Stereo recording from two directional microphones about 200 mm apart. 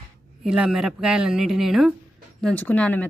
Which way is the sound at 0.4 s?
5° right (ahead or behind).